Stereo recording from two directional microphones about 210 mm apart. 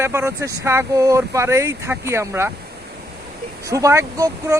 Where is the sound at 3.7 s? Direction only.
15° right (ahead or behind).